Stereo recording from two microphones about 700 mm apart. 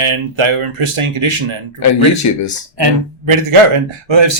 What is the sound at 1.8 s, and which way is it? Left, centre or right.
Speech, left.